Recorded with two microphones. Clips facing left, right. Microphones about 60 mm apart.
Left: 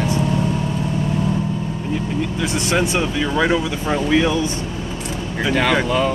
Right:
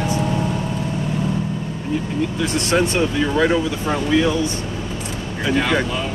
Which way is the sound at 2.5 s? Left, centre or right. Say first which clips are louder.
Right 1 dB; centre.